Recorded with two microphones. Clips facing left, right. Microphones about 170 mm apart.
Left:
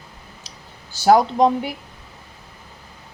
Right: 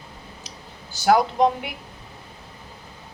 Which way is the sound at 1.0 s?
35° left (ahead or behind).